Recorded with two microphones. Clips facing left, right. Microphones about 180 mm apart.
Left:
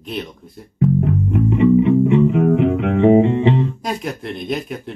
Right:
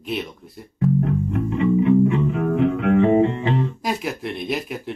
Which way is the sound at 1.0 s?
20° left (ahead or behind).